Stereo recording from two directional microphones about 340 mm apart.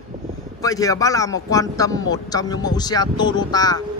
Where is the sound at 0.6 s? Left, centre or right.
Centre.